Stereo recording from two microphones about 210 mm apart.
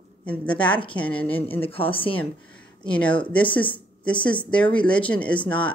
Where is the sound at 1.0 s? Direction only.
5° left (ahead or behind).